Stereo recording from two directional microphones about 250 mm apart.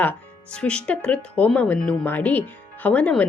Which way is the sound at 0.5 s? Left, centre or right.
Centre.